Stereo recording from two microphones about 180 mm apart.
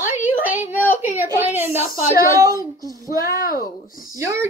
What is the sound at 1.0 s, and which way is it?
A child's voice, 10° right (ahead or behind).